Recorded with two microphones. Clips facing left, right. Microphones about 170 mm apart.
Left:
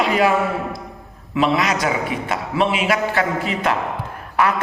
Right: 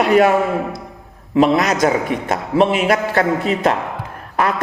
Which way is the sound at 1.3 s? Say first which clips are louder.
Right 5 dB; 45° right (ahead or behind).